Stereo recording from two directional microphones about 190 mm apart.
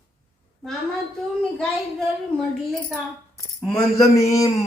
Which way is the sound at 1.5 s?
5° left (ahead or behind).